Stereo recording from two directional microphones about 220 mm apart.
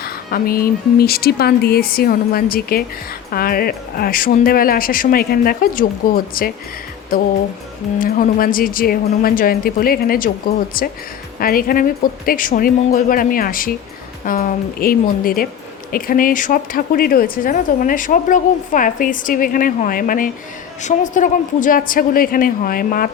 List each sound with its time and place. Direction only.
0.0 s speech: 40° left (ahead or behind)
7.9 s speech: 40° left (ahead or behind)